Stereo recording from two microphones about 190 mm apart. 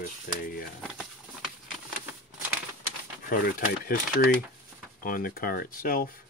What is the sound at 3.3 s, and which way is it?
Speech, 50° left (ahead or behind).